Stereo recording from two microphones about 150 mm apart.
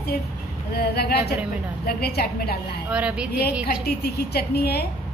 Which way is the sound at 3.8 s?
90° left.